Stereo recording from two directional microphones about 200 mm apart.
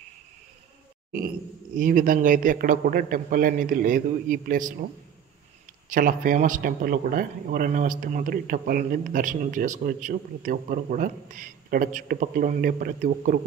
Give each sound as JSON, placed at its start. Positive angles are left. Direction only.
{"t": 1.8, "sound": "a man's voice", "side_deg": -40}
{"t": 5.9, "sound": "a man's voice", "side_deg": -40}